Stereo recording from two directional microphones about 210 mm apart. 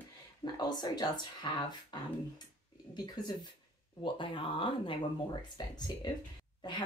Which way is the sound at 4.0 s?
25° left (ahead or behind).